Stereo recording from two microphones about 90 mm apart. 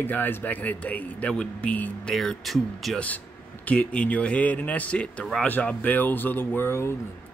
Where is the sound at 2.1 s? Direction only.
5° left (ahead or behind).